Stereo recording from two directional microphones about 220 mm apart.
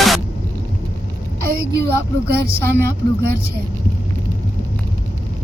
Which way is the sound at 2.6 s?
10° left (ahead or behind).